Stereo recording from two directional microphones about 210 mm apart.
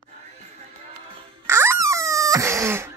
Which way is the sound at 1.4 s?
10° right (ahead or behind).